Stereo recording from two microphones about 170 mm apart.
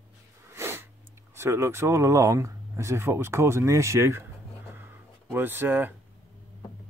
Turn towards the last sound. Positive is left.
turn(degrees=-10)  # may be behind; listen again after turning